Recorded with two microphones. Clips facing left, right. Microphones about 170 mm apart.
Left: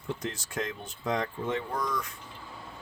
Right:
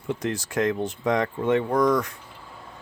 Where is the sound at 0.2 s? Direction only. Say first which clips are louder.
Right 9 dB; 75° right (ahead or behind).